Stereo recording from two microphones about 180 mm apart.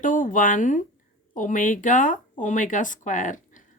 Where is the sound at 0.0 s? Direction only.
50° left (ahead or behind).